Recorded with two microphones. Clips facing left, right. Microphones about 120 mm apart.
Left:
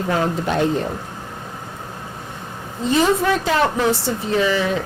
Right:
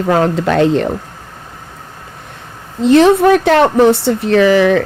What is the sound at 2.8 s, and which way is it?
Speech, 75° right (ahead or behind).